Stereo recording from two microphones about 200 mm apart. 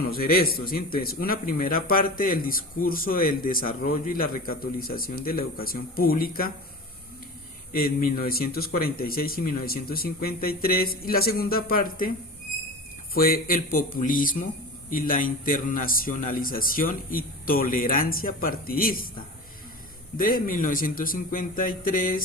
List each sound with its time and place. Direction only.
0.0 s a man's voice: 50° left (ahead or behind)
7.7 s a man's voice: 45° left (ahead or behind)
13.1 s a man's voice: 45° left (ahead or behind)
20.1 s a man's voice: 45° left (ahead or behind)